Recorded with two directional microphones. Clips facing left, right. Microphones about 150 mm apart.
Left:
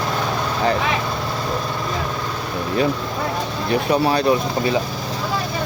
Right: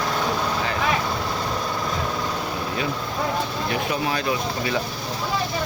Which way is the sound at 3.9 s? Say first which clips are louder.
Left 11 dB; 40° left (ahead or behind).